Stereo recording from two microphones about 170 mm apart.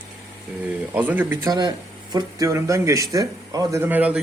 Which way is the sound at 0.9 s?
10° right (ahead or behind).